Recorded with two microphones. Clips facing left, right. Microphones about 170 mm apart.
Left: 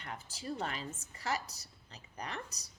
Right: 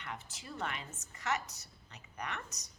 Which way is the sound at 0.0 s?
35° left (ahead or behind).